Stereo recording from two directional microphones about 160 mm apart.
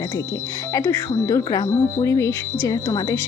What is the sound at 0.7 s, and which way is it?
Speech, 15° left (ahead or behind).